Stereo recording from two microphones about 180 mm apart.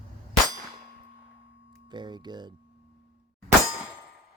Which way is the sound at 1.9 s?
25° right (ahead or behind).